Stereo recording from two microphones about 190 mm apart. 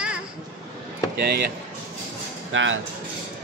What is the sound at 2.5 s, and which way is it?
Cutlery, 85° right.